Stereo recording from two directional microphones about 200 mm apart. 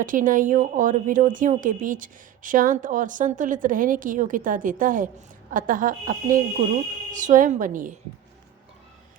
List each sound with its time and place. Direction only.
0.0 s a woman's voice: 40° right (ahead or behind)